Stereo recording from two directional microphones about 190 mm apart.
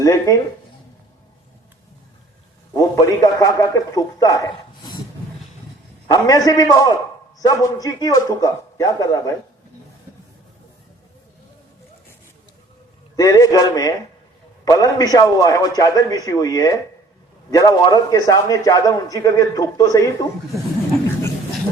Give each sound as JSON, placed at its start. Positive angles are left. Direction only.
{"t": 0.0, "sound": "a man's voice", "side_deg": 15}
{"t": 2.7, "sound": "a man's voice", "side_deg": 20}
{"t": 6.1, "sound": "a man's voice", "side_deg": 20}
{"t": 13.1, "sound": "a man's voice", "side_deg": 20}